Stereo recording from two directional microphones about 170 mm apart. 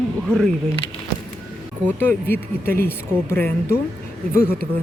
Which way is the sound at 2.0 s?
10° left (ahead or behind).